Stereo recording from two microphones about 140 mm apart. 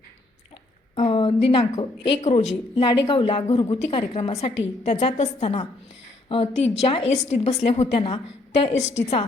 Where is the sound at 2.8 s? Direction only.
35° left (ahead or behind).